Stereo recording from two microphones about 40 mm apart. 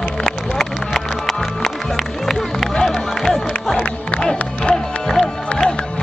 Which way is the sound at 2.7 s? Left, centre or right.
Centre.